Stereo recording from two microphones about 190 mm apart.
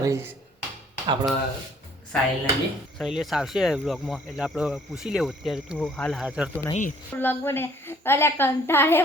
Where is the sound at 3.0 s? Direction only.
Centre (ahead or behind).